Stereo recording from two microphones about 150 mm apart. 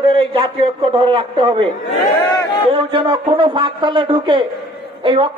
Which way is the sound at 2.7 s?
35° right (ahead or behind).